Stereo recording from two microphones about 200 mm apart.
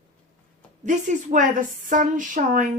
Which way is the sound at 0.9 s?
40° right (ahead or behind).